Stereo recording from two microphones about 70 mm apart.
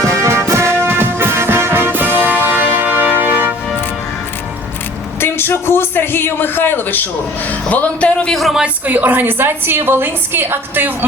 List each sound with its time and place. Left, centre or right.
0.0 s music: right
5.2 s a sound: left
7.7 s speech: centre
8.4 s speech: centre
8.6 s a woman's voice: right